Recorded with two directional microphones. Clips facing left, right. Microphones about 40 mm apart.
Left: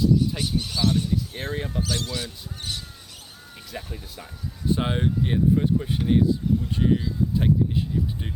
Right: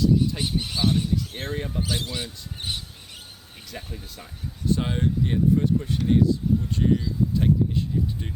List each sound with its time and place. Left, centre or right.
0.3 s speech: centre
1.4 s speech: centre
1.8 s speech: centre
3.7 s speech: centre
4.7 s speech: left